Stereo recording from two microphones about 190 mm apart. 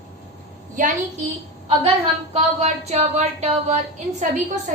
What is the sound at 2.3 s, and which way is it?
A woman's voice, 35° right (ahead or behind).